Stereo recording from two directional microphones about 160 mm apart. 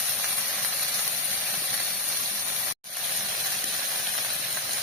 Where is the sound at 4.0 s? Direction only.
Centre (ahead or behind).